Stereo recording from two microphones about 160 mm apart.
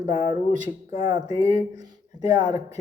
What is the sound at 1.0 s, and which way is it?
Speech, 25° right (ahead or behind).